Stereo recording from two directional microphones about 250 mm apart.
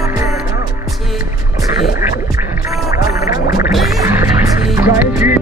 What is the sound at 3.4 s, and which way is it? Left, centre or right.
Music, left.